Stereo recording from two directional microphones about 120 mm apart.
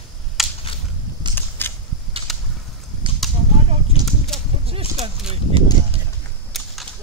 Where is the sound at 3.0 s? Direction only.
45° right (ahead or behind).